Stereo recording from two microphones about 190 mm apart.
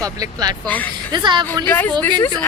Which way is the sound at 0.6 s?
10° left (ahead or behind).